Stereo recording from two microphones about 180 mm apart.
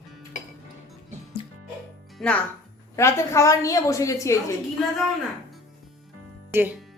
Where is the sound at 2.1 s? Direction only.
5° left (ahead or behind).